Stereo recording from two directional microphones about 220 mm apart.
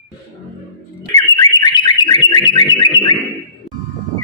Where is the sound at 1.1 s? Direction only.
15° left (ahead or behind).